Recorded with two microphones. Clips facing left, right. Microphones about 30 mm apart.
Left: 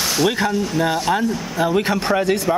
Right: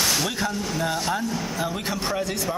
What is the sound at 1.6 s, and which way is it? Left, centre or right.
Speech, left.